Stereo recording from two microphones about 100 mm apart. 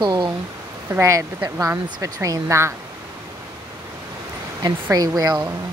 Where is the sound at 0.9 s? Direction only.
30° right (ahead or behind).